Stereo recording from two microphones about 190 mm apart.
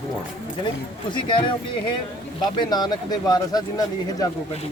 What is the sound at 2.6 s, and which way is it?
Speech, 20° left (ahead or behind).